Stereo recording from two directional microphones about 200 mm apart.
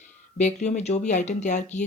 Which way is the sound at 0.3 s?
35° left (ahead or behind).